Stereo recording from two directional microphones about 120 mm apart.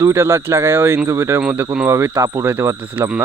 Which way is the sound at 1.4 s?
10° right (ahead or behind).